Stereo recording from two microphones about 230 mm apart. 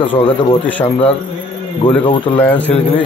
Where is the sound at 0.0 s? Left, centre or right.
Left.